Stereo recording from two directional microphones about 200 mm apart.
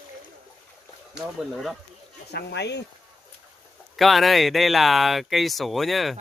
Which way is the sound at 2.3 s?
55° left (ahead or behind).